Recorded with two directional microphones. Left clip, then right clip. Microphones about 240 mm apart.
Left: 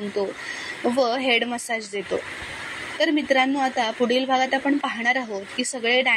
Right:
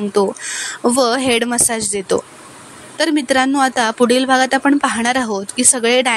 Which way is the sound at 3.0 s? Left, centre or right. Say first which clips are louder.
Right 5 dB; right.